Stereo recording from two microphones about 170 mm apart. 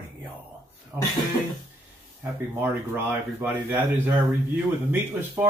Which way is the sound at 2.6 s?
10° right (ahead or behind).